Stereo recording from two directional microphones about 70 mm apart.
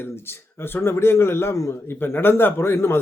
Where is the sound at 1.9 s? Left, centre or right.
Left.